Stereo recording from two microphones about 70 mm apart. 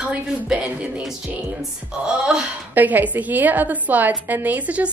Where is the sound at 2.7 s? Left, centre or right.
Right.